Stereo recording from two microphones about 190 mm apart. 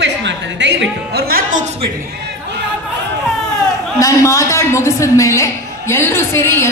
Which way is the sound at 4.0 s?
15° left (ahead or behind).